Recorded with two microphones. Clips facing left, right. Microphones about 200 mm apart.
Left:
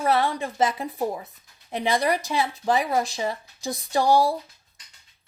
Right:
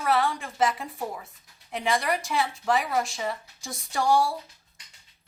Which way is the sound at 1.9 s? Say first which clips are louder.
Left 3 dB; 35° left (ahead or behind).